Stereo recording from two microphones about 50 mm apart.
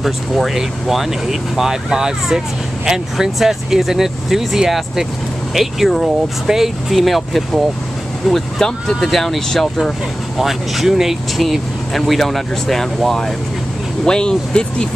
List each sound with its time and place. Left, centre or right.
0.0 s speech: centre